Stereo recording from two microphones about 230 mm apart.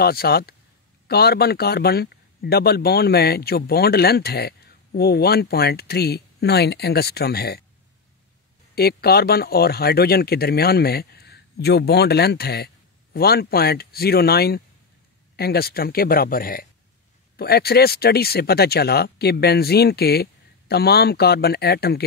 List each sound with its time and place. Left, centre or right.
0.0 s speech: left
8.7 s speech: left